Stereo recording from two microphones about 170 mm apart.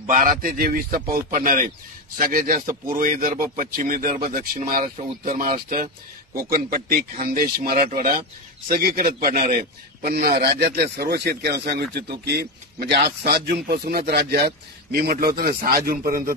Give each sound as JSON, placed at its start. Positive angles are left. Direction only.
{"t": 0.1, "sound": "speech", "side_deg": -50}